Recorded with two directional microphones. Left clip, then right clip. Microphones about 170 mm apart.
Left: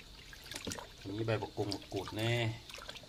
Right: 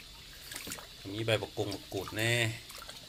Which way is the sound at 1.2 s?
5° left (ahead or behind).